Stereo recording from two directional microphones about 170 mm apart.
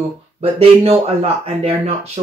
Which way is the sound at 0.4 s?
35° right (ahead or behind).